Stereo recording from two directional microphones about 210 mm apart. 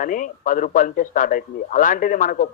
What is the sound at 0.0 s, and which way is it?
Speech, 40° left (ahead or behind).